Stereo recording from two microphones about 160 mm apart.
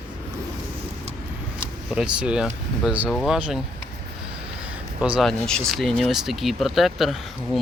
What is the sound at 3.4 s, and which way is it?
Speech, 10° right (ahead or behind).